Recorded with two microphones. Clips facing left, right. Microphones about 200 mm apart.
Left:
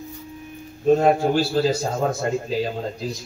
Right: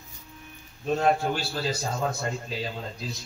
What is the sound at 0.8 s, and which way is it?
A man's voice, 45° left (ahead or behind).